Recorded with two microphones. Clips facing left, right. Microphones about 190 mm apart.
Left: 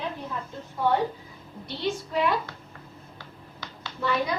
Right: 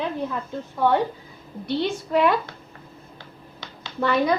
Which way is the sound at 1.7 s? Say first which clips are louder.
Right 6 dB; 65° right (ahead or behind).